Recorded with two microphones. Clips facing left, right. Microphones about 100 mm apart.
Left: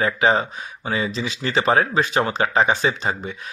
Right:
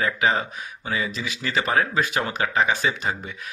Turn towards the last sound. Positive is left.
turn(degrees=30)  # may be behind; listen again after turning